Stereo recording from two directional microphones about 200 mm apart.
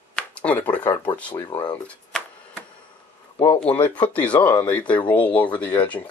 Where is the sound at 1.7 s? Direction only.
5° left (ahead or behind).